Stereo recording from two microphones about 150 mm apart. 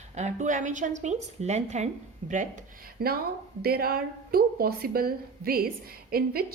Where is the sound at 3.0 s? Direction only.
90° right.